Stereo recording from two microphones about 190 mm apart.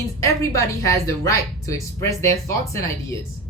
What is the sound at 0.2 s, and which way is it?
Speech, 15° left (ahead or behind).